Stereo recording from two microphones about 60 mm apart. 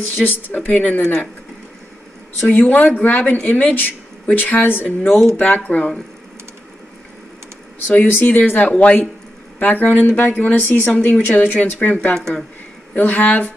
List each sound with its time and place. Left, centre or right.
0.0 s speech: left
0.6 s speech: left
2.4 s speech: left
5.1 s speech: centre
5.4 s speech: left
7.9 s speech: left
12.1 s speech: centre
12.9 s speech: left